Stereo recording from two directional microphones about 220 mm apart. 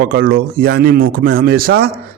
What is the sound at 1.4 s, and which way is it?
Mantra, 40° right (ahead or behind).